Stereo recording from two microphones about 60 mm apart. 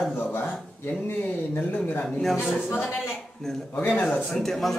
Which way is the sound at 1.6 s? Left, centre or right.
Left.